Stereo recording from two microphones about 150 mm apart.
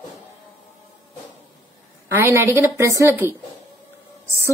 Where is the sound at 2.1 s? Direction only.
15° right (ahead or behind).